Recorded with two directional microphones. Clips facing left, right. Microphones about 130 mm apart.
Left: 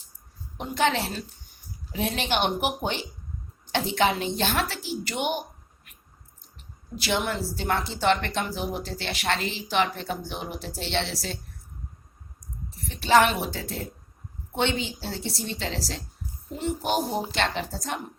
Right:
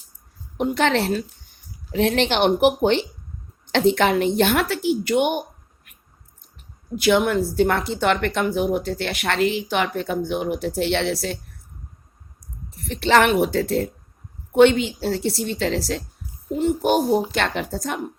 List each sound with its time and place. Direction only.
0.5 s a woman's voice: 60° right (ahead or behind)
6.9 s a woman's voice: 55° right (ahead or behind)
12.9 s a woman's voice: 75° right (ahead or behind)
16.6 s a child's voice: 50° right (ahead or behind)